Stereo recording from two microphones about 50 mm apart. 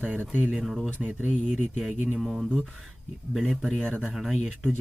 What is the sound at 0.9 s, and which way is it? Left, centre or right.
Speech, right.